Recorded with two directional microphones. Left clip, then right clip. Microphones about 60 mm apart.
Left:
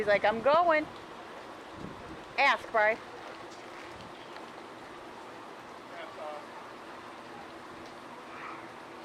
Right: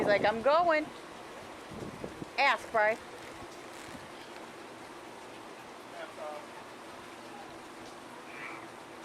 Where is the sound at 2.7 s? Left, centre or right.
Centre.